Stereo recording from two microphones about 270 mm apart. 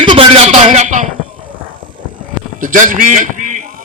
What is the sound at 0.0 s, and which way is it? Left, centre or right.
A man's voice, centre.